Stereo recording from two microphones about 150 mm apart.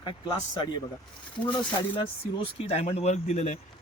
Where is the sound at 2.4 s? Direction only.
40° left (ahead or behind).